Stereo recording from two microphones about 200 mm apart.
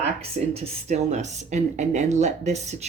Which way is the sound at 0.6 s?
35° right (ahead or behind).